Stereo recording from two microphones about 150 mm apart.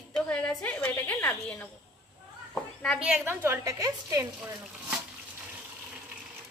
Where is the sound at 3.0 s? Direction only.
10° right (ahead or behind).